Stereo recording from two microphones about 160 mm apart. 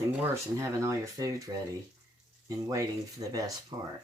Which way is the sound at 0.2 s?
20° right (ahead or behind).